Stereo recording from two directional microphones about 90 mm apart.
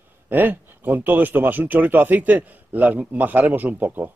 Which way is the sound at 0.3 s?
20° right (ahead or behind).